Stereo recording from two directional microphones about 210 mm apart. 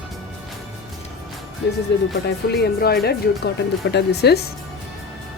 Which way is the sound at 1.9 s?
50° left (ahead or behind).